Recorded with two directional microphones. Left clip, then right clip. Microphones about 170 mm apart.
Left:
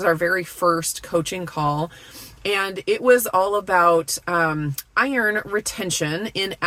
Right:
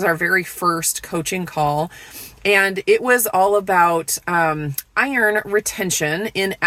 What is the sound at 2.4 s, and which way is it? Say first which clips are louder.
Speech: right 7 dB; 15° right (ahead or behind).